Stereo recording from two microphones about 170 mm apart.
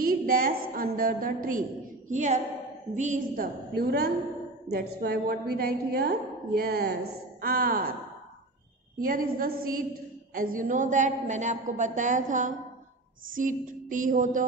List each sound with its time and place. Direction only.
0.0 s a woman's voice: 60° right (ahead or behind)
2.0 s a woman's voice: 45° right (ahead or behind)
9.0 s a woman's voice: 55° right (ahead or behind)